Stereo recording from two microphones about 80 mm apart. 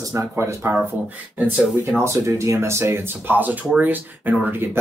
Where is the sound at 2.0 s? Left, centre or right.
Right.